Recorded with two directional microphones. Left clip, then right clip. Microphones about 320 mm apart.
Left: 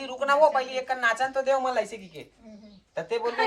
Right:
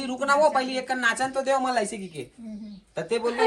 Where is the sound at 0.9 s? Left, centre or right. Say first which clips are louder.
Right 1 dB; centre.